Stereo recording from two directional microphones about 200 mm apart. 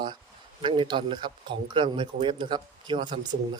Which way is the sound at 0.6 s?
25° right (ahead or behind).